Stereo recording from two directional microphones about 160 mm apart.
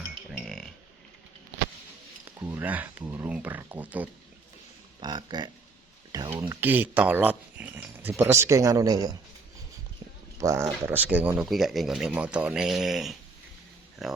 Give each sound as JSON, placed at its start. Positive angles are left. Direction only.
{"t": 0.4, "sound": "a sound", "side_deg": 0}
{"t": 2.4, "sound": "speech", "side_deg": -10}
{"t": 4.9, "sound": "speech", "side_deg": -25}
{"t": 6.5, "sound": "speech", "side_deg": -10}
{"t": 10.4, "sound": "speech", "side_deg": -20}